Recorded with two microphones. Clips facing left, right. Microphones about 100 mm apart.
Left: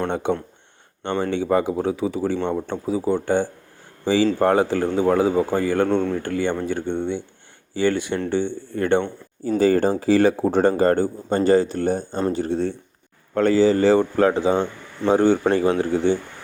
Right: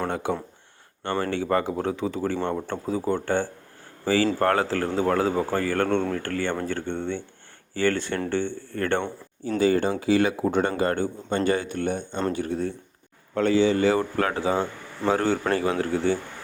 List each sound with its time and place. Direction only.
0.1 s speech: 20° left (ahead or behind)
9.6 s a man's voice: 40° left (ahead or behind)
13.3 s a man's voice: 40° left (ahead or behind); by 16.1 s 20° left (ahead or behind)